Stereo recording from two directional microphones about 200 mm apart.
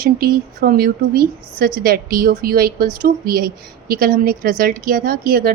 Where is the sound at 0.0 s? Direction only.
45° right (ahead or behind).